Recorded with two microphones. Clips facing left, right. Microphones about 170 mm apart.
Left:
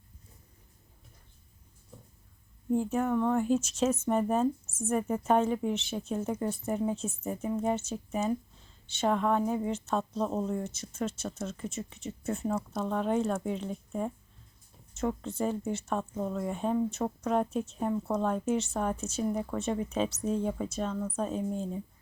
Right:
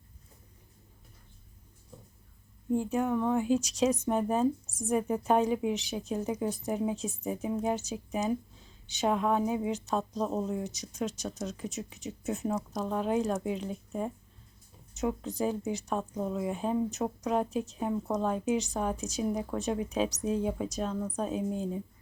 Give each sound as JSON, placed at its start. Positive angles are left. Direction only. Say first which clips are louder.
{"t": 2.7, "sound": "a woman's voice", "louder": "left 1 dB", "side_deg": 0}